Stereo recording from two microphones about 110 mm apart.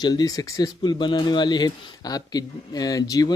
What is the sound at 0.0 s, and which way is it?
Speech, 35° left (ahead or behind).